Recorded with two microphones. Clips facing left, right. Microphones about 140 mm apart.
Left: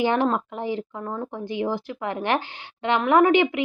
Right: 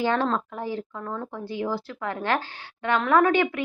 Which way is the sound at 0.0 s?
15° left (ahead or behind).